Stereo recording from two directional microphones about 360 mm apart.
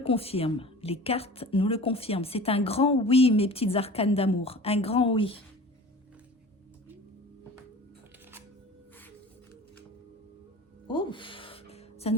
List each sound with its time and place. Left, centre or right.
0.0 s a woman's voice: centre
10.8 s music: centre